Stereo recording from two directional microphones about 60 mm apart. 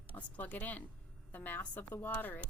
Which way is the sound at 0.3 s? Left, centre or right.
Left.